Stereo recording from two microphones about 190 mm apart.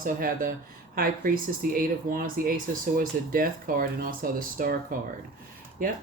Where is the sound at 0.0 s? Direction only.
50° right (ahead or behind).